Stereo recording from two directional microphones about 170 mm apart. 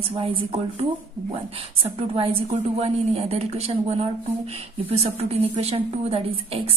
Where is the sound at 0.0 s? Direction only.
30° right (ahead or behind).